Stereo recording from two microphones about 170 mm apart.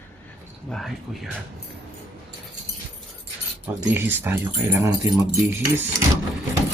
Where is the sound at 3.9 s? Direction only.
15° right (ahead or behind).